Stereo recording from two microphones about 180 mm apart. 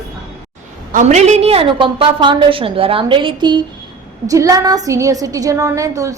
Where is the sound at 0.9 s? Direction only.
40° right (ahead or behind).